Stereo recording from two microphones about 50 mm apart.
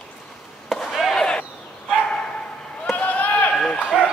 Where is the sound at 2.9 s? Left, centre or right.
Left.